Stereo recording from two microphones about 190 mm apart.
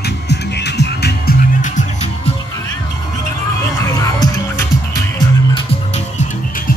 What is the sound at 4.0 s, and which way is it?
Music, 15° left (ahead or behind).